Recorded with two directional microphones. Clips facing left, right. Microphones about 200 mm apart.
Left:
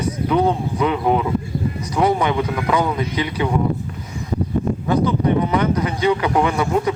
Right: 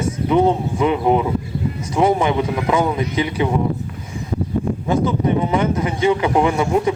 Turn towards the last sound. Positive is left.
turn(degrees=-20)  # may be behind; listen again after turning